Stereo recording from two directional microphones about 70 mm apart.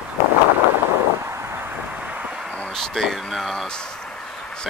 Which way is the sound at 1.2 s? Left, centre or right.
Right.